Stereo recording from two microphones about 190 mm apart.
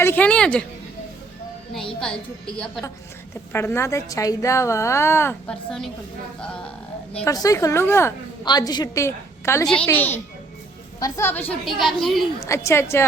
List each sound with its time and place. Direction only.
0.0 s a woman's voice: 10° left (ahead or behind)
1.7 s a woman's voice: 5° left (ahead or behind)
3.5 s a woman's voice: 10° left (ahead or behind)
7.3 s a woman's voice: 20° left (ahead or behind); by 12.2 s centre (ahead or behind)
12.4 s a woman's voice: 15° left (ahead or behind)